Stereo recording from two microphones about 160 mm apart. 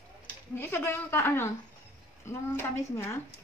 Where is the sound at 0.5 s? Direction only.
15° left (ahead or behind).